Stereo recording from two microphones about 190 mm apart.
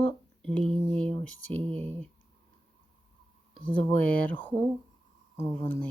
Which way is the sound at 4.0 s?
10° left (ahead or behind).